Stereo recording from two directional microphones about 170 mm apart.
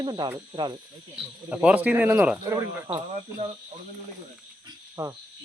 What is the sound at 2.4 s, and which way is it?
Speech, 20° right (ahead or behind).